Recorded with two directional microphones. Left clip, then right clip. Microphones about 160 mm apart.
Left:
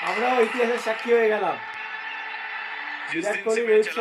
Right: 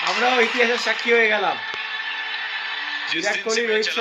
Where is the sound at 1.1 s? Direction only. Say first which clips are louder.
Right 2 dB; 25° left (ahead or behind).